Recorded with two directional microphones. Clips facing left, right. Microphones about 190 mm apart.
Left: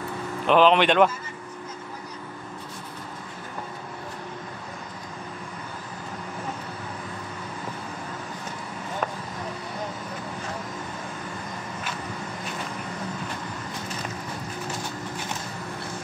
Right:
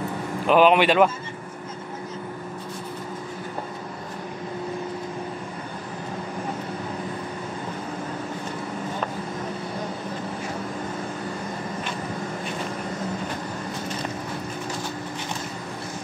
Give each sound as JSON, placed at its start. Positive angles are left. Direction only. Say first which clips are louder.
{"t": 0.5, "sound": "a man's voice", "louder": "right 1 dB", "side_deg": -10}